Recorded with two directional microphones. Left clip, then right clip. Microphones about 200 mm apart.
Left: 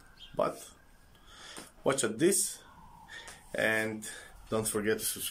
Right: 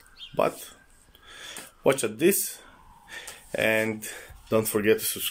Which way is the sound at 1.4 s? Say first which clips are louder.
Right 8 dB; centre (ahead or behind).